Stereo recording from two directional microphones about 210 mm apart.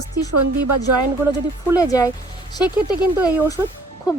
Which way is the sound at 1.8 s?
15° left (ahead or behind).